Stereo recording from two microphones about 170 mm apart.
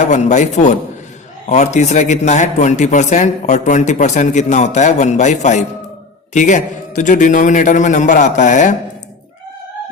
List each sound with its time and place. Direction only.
0.1 s a man's voice: 45° left (ahead or behind)